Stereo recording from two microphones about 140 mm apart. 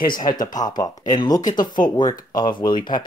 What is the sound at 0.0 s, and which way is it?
Speech, 90° left.